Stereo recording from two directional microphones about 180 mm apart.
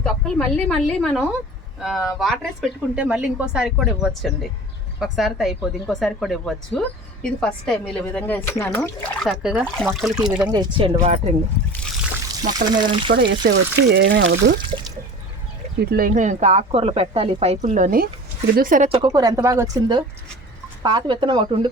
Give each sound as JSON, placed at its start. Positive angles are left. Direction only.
{"t": 0.0, "sound": "a woman's voice", "side_deg": 5}
{"t": 9.2, "sound": "a woman's voice", "side_deg": 0}
{"t": 10.5, "sound": "a woman's voice", "side_deg": -25}
{"t": 11.0, "sound": "speech", "side_deg": -40}
{"t": 12.4, "sound": "a woman's voice", "side_deg": -20}
{"t": 13.1, "sound": "speech", "side_deg": -70}
{"t": 15.8, "sound": "speech", "side_deg": -55}
{"t": 19.0, "sound": "a woman's voice", "side_deg": -20}